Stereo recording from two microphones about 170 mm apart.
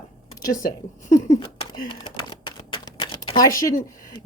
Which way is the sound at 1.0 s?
50° left (ahead or behind).